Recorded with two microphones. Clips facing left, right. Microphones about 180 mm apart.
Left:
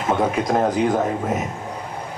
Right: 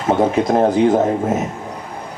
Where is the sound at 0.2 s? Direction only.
30° right (ahead or behind).